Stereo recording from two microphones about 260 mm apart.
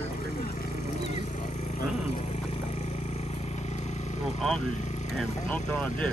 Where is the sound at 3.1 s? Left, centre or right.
Left.